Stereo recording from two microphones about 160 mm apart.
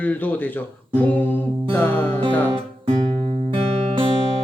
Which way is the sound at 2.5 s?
30° right (ahead or behind).